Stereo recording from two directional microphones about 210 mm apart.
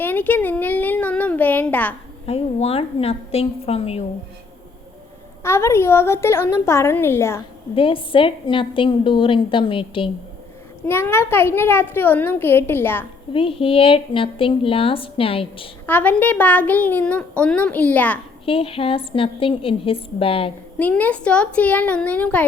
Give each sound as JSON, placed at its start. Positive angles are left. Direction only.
{"t": 0.0, "sound": "a woman's voice", "side_deg": 10}
{"t": 2.2, "sound": "speech", "side_deg": 30}
{"t": 5.4, "sound": "a child's voice", "side_deg": 10}
{"t": 7.8, "sound": "speech", "side_deg": 25}
{"t": 10.8, "sound": "a child's voice", "side_deg": 10}
{"t": 13.3, "sound": "speech", "side_deg": 25}
{"t": 15.9, "sound": "a child's voice", "side_deg": 10}
{"t": 18.4, "sound": "speech", "side_deg": 25}
{"t": 20.7, "sound": "a child's voice", "side_deg": 5}